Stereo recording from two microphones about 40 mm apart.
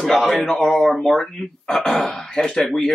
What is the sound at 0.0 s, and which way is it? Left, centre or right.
Speech, centre.